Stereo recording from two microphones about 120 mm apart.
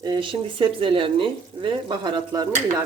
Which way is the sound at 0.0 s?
40° right (ahead or behind).